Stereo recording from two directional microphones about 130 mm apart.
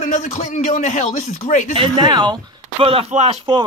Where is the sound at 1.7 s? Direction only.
35° right (ahead or behind); by 3.3 s 55° right (ahead or behind).